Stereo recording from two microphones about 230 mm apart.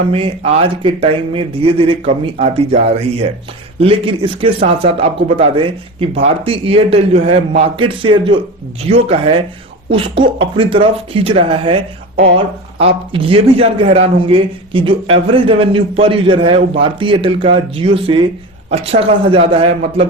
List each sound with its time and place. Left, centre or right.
0.1 s a man's voice: right
12.8 s a man's voice: right